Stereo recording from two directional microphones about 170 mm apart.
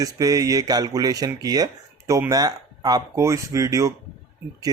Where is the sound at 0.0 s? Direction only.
20° right (ahead or behind).